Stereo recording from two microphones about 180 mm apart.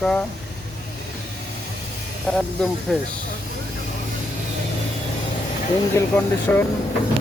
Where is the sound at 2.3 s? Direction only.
5° left (ahead or behind).